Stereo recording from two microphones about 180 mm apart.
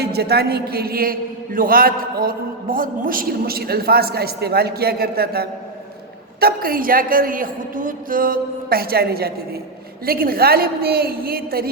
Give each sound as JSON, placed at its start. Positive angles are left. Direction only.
{"t": 0.0, "sound": "a man's voice", "side_deg": -60}